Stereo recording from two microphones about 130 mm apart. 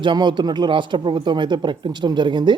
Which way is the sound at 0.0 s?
35° right (ahead or behind).